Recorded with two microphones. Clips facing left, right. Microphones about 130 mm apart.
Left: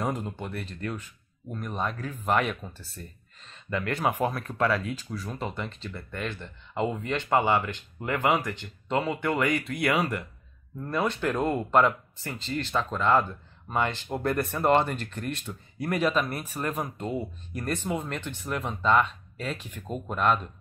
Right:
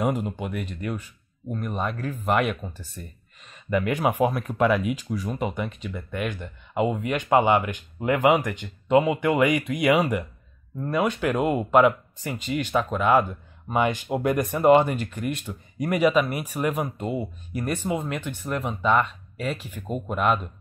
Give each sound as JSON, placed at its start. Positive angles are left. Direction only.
{"t": 0.0, "sound": "speech", "side_deg": -10}